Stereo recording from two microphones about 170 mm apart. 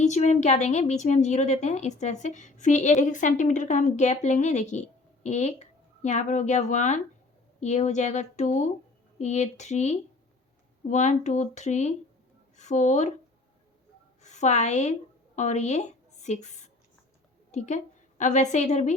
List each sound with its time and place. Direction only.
0.0 s a woman's voice: 45° left (ahead or behind)
14.2 s a woman's voice: 45° left (ahead or behind)
18.2 s a woman's voice: 45° left (ahead or behind)